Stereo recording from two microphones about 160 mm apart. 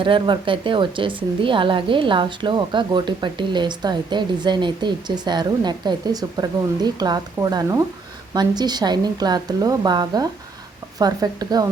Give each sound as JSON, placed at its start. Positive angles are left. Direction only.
{"t": 0.0, "sound": "a woman's voice", "side_deg": -30}